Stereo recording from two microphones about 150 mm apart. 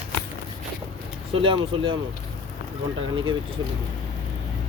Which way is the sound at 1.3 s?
35° right (ahead or behind).